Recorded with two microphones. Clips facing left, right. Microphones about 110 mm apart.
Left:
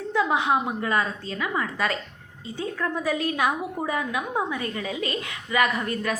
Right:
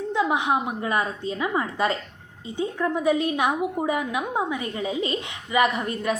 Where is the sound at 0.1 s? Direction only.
20° right (ahead or behind).